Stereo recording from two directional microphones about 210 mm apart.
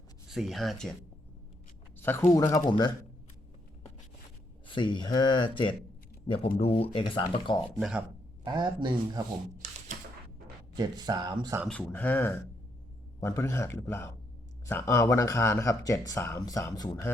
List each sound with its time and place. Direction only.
0.3 s speech: centre (ahead or behind)
2.0 s speech: 10° left (ahead or behind)
4.6 s speech: 20° left (ahead or behind)
7.8 s speech: 5° right (ahead or behind)
8.4 s speech: 20° right (ahead or behind)
9.6 s a sound: 35° right (ahead or behind)
10.8 s speech: 20° right (ahead or behind)
11.7 s speech: 5° left (ahead or behind)